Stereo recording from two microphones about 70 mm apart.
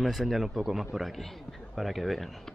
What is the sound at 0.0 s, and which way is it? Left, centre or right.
Speech, centre.